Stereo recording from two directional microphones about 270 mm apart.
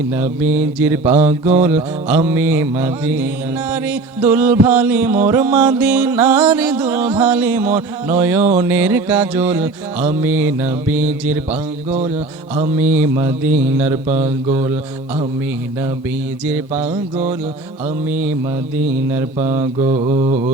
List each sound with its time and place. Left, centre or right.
0.1 s music: centre
11.9 s mantra: right
12.7 s music: centre
16.5 s music: centre
18.1 s music: centre
19.9 s mantra: right